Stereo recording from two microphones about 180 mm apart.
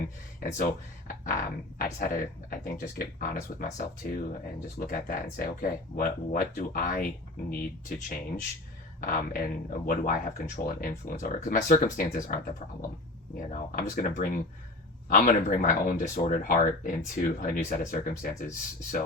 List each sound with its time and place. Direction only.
0.3 s speech: 45° left (ahead or behind)